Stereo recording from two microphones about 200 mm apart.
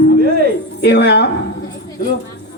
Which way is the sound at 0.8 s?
55° left (ahead or behind).